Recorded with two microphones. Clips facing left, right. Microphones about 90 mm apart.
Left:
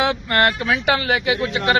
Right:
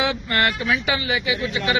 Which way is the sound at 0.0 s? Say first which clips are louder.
Left 3 dB; 50° left (ahead or behind).